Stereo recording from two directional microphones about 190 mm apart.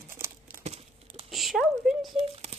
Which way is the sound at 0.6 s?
35° right (ahead or behind).